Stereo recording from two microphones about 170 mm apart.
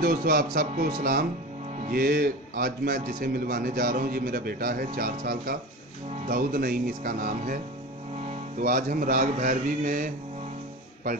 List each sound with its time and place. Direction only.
0.0 s a man's voice: 60° right (ahead or behind)